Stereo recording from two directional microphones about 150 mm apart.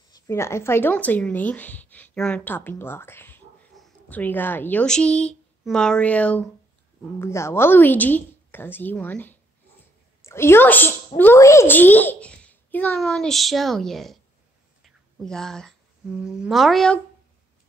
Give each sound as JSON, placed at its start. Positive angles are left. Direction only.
{"t": 0.1, "sound": "a child's voice", "side_deg": 20}
{"t": 14.9, "sound": "a sound", "side_deg": 5}
{"t": 16.2, "sound": "speech", "side_deg": -5}